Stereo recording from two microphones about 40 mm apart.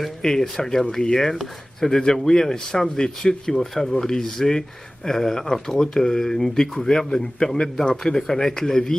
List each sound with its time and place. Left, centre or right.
0.2 s a man's voice: centre